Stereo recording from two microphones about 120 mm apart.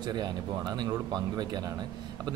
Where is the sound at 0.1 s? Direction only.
35° right (ahead or behind).